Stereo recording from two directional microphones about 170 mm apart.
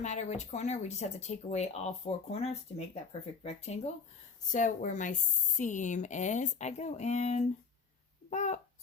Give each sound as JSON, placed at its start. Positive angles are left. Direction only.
{"t": 0.0, "sound": "speech", "side_deg": 45}